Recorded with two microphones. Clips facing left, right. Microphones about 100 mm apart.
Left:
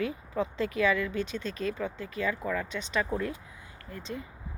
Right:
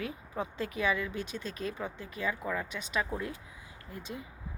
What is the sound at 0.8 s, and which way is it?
Speech, 15° right (ahead or behind).